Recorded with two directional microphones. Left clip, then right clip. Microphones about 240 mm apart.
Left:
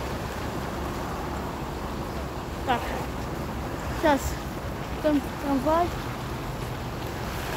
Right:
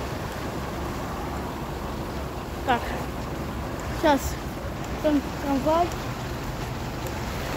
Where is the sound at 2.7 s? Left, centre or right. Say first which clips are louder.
Right 2 dB; right.